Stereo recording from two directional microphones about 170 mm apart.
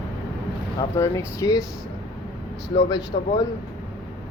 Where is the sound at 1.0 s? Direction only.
20° left (ahead or behind).